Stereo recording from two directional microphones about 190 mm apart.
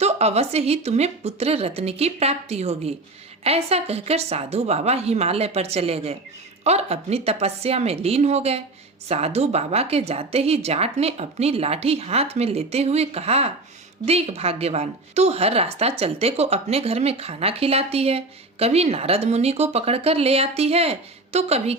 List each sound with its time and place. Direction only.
0.0 s a woman's voice: 35° right (ahead or behind)